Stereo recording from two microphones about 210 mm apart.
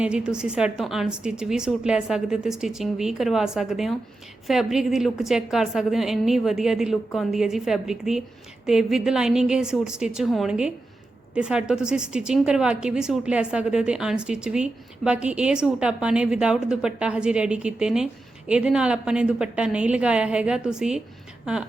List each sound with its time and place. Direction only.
0.0 s a woman's voice: 5° right (ahead or behind)